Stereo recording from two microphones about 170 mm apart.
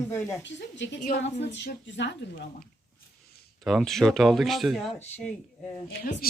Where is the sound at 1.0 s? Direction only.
75° left (ahead or behind).